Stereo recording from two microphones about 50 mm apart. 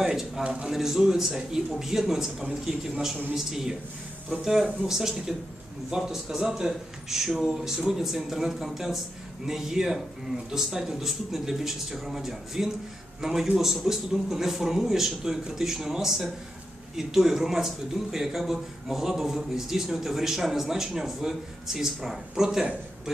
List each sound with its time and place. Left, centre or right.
0.0 s a man's voice: centre
4.8 s a man's voice: centre